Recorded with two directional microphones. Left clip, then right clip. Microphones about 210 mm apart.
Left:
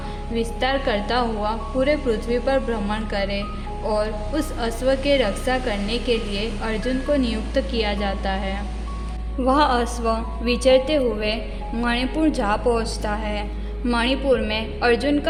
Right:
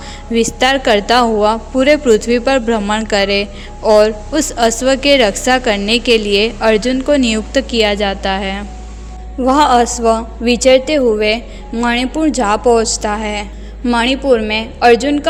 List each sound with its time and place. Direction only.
0.3 s a woman's voice: 40° right (ahead or behind)
9.4 s a woman's voice: 25° right (ahead or behind)